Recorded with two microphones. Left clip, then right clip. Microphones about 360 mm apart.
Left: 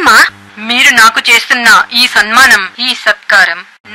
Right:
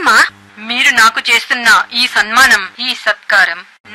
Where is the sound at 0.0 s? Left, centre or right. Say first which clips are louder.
Left 4 dB; left.